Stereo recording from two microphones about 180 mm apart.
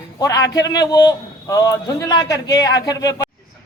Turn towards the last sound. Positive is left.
turn(degrees=20)  # may be behind; listen again after turning